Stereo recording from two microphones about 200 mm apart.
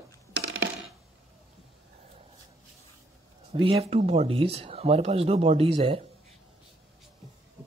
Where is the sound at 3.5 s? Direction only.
30° right (ahead or behind).